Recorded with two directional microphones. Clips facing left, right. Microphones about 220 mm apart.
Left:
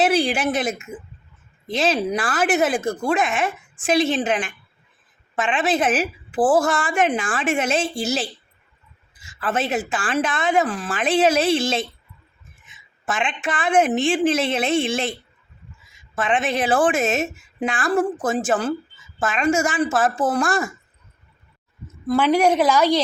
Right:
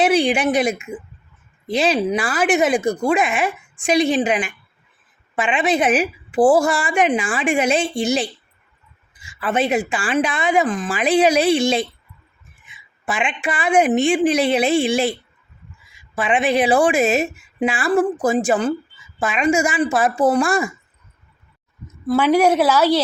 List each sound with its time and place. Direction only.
0.0 s a woman's voice: 5° left (ahead or behind)
2.4 s a woman's voice: 5° left (ahead or behind)
9.5 s a woman's voice: centre (ahead or behind)
13.1 s a woman's voice: centre (ahead or behind)
16.1 s a woman's voice: centre (ahead or behind)
22.0 s a woman's voice: 5° right (ahead or behind)